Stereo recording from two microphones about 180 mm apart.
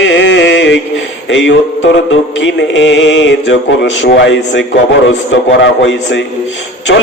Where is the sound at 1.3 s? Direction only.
90° left.